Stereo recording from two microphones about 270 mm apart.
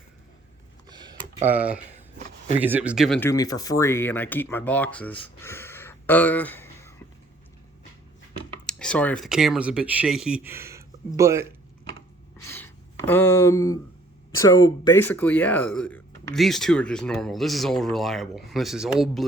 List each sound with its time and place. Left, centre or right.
0.9 s computer keyboard: centre
1.5 s speech: centre
8.6 s speech: centre
12.4 s a sound: centre
14.4 s speech: centre